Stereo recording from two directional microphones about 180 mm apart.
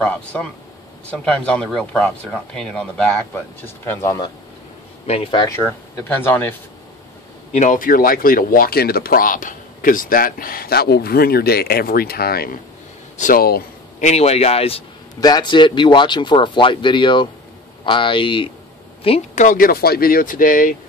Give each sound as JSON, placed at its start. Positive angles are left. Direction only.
{"t": 0.0, "sound": "speech", "side_deg": 5}
{"t": 5.0, "sound": "speech", "side_deg": 30}
{"t": 7.5, "sound": "speech", "side_deg": 45}
{"t": 14.0, "sound": "a man's voice", "side_deg": 35}
{"t": 15.1, "sound": "speech", "side_deg": 20}